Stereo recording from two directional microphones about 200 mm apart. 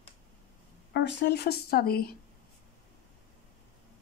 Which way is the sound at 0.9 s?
60° left (ahead or behind).